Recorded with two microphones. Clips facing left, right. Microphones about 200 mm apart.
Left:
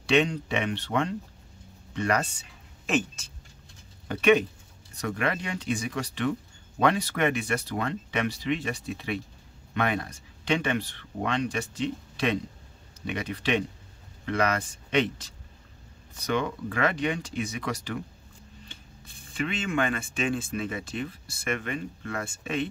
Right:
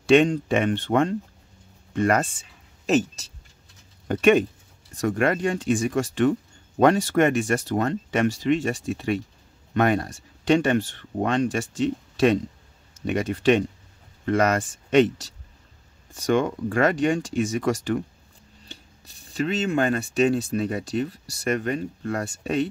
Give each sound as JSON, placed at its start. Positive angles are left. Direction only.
{"t": 0.0, "sound": "speech", "side_deg": -45}
{"t": 2.9, "sound": "speech", "side_deg": -40}
{"t": 19.0, "sound": "speech", "side_deg": -40}